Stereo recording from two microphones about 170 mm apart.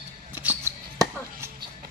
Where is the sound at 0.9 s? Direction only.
20° right (ahead or behind).